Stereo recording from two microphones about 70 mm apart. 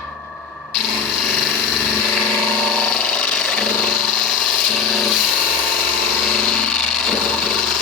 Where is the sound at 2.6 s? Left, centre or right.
Centre.